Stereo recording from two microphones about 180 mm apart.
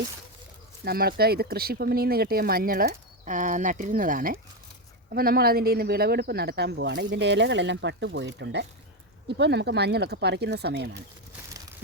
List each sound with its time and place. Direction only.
0.9 s speech: 60° right (ahead or behind)